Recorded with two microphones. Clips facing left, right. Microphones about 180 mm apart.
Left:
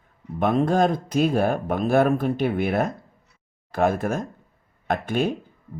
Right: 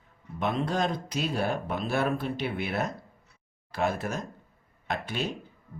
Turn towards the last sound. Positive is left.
turn(degrees=50)  # may be behind; listen again after turning